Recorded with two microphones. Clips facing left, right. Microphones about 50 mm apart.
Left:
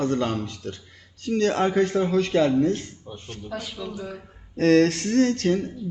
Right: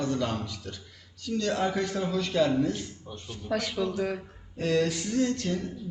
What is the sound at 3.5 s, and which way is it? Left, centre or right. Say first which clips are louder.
Speech: right 4 dB; right.